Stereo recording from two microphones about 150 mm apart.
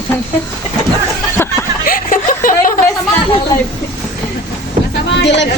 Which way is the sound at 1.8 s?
65° left (ahead or behind).